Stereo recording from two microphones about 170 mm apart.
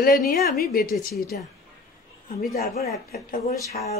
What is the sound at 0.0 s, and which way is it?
A woman's voice, 60° left (ahead or behind).